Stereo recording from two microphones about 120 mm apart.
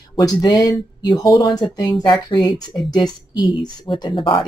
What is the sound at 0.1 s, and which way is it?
Speech, 35° left (ahead or behind).